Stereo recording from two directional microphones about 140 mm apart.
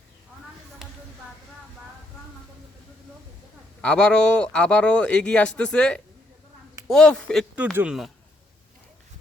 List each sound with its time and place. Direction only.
3.8 s a man's voice: 5° left (ahead or behind)
7.5 s speech: 10° right (ahead or behind)